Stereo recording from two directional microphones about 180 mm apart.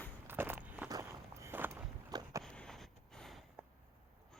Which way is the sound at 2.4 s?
5° left (ahead or behind).